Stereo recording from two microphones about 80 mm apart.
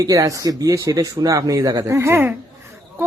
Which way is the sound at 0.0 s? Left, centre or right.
Right.